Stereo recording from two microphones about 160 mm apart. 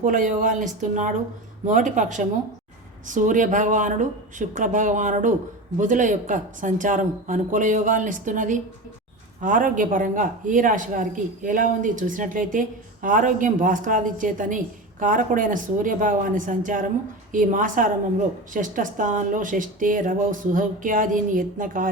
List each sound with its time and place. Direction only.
0.0 s speech: 55° right (ahead or behind)